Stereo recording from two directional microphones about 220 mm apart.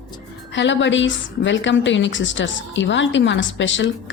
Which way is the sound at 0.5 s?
55° left (ahead or behind).